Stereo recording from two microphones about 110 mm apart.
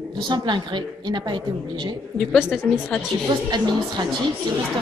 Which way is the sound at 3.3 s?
40° right (ahead or behind).